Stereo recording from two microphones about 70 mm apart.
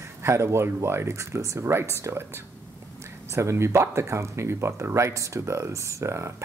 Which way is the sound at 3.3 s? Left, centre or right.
Right.